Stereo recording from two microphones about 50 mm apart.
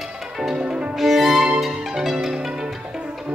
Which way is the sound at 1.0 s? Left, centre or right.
Centre.